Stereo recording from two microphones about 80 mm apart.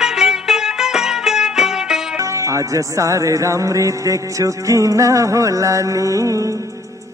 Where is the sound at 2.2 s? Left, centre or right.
Right.